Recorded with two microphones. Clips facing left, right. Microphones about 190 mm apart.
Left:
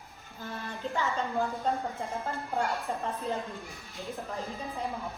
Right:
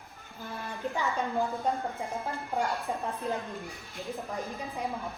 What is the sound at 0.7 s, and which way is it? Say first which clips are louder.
A woman's voice: even; 15° right (ahead or behind).